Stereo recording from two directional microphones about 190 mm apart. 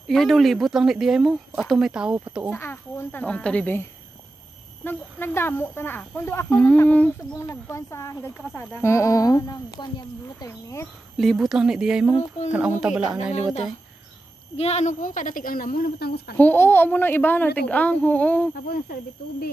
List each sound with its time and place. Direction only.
0.0 s speech: centre (ahead or behind)
2.5 s speech: 10° left (ahead or behind)
4.8 s speech: 10° left (ahead or behind)
11.1 s speech: centre (ahead or behind)
12.1 s music: 30° left (ahead or behind)
12.4 s speech: 10° right (ahead or behind)
13.3 s a woman's voice: 35° left (ahead or behind); by 16.3 s 55° left (ahead or behind)
16.3 s speech: 10° left (ahead or behind)
18.5 s a woman's voice: 55° left (ahead or behind)